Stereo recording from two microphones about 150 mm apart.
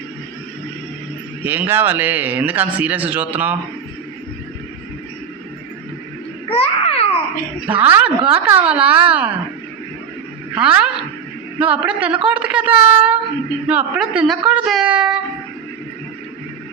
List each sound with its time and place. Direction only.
1.5 s speech: 15° right (ahead or behind)
6.5 s babbling: 40° left (ahead or behind)
7.7 s speech: 10° right (ahead or behind)
10.5 s speech: 10° right (ahead or behind)